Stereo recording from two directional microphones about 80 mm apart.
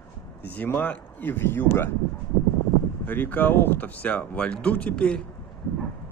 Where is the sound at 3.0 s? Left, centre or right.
Left.